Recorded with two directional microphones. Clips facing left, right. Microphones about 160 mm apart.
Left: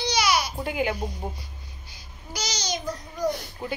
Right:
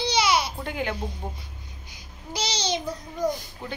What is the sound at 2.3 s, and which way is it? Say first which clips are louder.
Babbling: right 3 dB; 30° right (ahead or behind).